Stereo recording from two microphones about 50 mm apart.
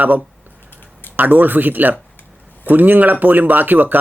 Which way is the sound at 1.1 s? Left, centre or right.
Right.